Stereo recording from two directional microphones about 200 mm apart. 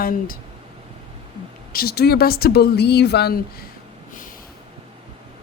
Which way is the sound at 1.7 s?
50° left (ahead or behind).